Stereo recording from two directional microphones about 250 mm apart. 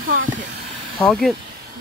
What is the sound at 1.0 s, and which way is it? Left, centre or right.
Speech, centre.